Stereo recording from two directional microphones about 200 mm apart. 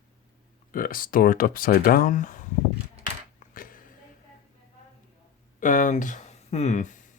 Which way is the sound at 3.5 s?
45° left (ahead or behind).